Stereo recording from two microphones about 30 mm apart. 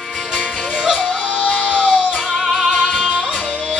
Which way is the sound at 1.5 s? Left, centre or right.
Left.